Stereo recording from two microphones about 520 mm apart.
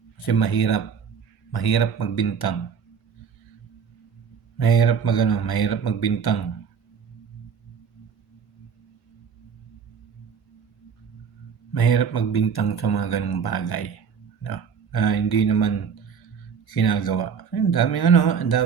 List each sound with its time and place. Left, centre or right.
0.2 s speech: left
4.5 s speech: left
11.7 s speech: left